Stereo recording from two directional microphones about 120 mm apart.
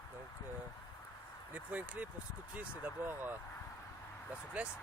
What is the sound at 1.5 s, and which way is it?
Speech, 15° right (ahead or behind).